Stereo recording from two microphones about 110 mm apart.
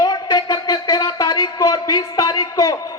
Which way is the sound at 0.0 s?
40° left (ahead or behind).